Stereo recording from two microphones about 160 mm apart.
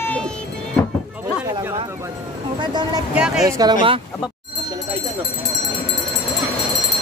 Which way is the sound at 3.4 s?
20° right (ahead or behind).